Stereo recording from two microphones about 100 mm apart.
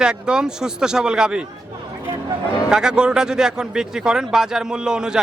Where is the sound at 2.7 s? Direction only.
5° right (ahead or behind).